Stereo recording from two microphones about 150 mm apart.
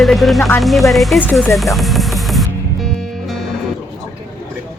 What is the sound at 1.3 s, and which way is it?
Music, centre (ahead or behind).